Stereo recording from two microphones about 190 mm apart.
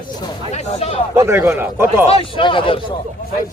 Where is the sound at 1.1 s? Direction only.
15° right (ahead or behind).